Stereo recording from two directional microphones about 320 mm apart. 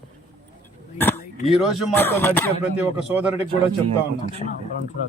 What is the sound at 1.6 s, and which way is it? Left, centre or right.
Music, centre.